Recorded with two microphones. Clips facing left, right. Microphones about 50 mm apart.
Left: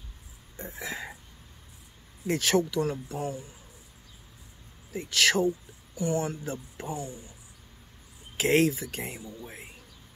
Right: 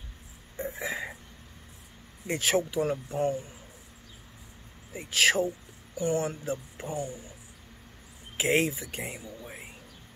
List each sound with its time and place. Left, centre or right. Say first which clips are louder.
0.6 s burping: right 4 dB; right
2.2 s speech: left 2 dB; centre
3.2 s speech: right 5 dB; right
4.9 s speech: even; centre
5.9 s speech: right 1 dB; right
6.4 s speech: right 2 dB; centre
6.9 s speech: right 2 dB; right
8.4 s speech: left 3 dB; centre